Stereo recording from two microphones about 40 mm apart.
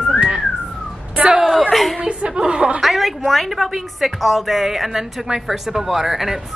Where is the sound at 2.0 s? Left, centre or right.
Right.